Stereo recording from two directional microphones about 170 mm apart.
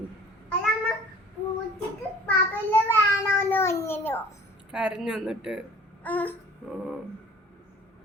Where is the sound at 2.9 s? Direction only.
15° left (ahead or behind).